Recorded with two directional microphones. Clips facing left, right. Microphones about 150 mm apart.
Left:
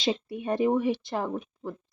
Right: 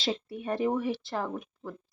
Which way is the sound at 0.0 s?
20° left (ahead or behind).